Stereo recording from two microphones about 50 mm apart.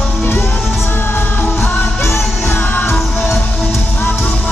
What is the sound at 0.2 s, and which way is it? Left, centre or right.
Music, left.